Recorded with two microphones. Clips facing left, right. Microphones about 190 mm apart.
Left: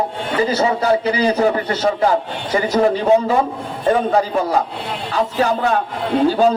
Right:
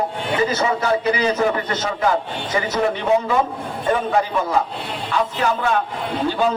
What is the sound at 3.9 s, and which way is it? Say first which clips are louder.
A man's voice: left 4 dB; 35° left (ahead or behind).